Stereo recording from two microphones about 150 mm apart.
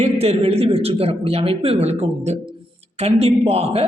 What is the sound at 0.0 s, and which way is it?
A man's voice, 45° right (ahead or behind).